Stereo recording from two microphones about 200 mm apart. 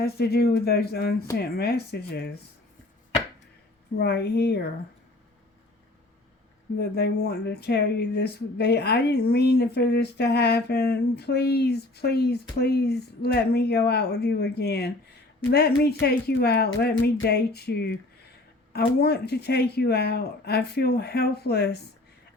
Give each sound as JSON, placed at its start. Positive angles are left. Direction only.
{"t": 0.0, "sound": "speech", "side_deg": 50}
{"t": 3.9, "sound": "speech", "side_deg": 55}
{"t": 6.7, "sound": "speech", "side_deg": 55}